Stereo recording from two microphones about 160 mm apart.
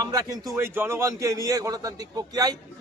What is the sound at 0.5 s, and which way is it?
A man's voice, 15° right (ahead or behind).